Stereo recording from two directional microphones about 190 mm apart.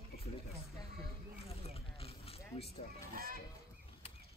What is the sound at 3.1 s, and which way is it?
Goose, 50° right (ahead or behind).